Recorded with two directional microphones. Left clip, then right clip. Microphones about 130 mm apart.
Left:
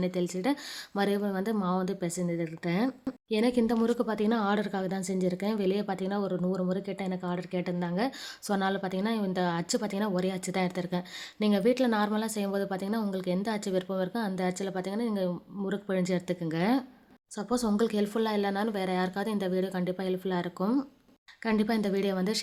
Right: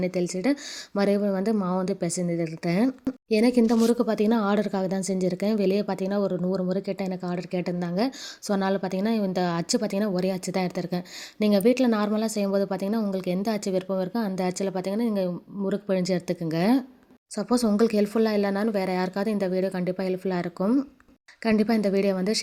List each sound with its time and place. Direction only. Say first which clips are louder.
0.0 s speech: right 4 dB; 25° right (ahead or behind)